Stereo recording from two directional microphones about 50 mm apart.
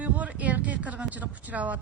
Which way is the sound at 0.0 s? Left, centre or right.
Right.